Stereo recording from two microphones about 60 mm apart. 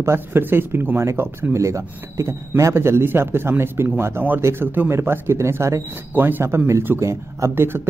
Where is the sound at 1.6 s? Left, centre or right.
Right.